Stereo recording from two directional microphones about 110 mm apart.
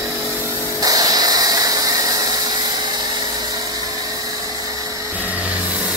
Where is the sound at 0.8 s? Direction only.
35° right (ahead or behind).